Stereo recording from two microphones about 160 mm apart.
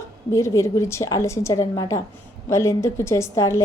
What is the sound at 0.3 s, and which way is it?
A woman's voice, 15° left (ahead or behind).